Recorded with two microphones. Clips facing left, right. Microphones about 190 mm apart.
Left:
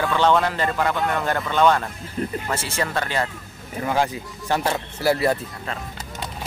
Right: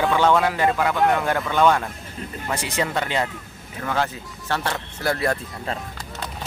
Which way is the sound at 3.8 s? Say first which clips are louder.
Left 3 dB; 15° left (ahead or behind).